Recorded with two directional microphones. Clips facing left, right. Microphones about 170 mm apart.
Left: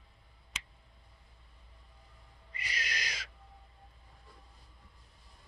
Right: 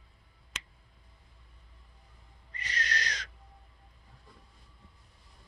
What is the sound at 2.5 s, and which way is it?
Owl, 10° left (ahead or behind).